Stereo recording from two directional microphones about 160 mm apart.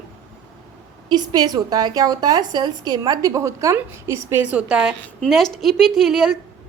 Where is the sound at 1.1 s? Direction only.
25° right (ahead or behind); by 6.3 s centre (ahead or behind).